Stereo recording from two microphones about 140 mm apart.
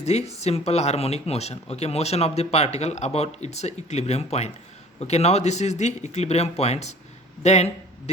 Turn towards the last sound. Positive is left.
turn(degrees=50)  # may be behind; listen again after turning